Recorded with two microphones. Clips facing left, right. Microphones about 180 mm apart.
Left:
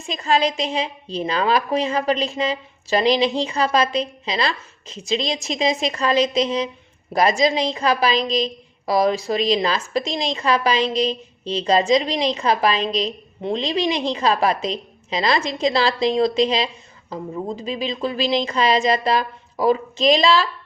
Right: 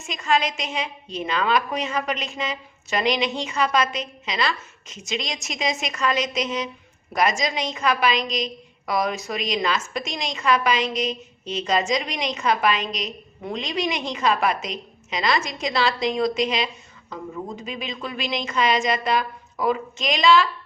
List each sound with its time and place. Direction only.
0.0 s a woman's voice: 35° left (ahead or behind)